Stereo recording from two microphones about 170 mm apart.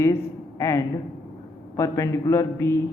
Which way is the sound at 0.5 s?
20° left (ahead or behind).